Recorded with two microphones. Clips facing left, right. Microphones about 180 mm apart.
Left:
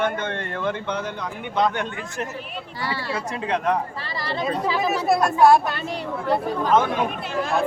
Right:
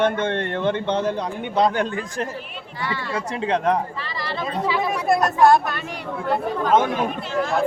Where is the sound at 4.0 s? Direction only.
35° left (ahead or behind).